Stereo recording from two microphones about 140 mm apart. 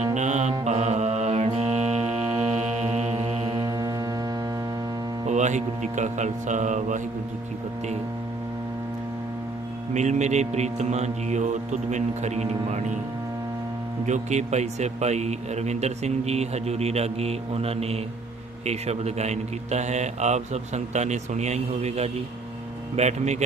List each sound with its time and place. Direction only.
0.0 s music: 55° right (ahead or behind)
3.6 s music: 25° right (ahead or behind)
5.2 s speech: 55° right (ahead or behind)
9.9 s speech: 55° right (ahead or behind)
14.1 s a man's voice: 55° right (ahead or behind)